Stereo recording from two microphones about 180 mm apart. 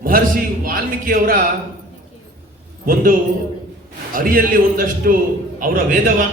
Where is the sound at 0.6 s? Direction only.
55° right (ahead or behind).